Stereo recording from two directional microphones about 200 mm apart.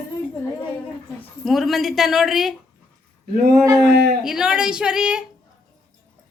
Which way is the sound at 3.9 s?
55° right (ahead or behind).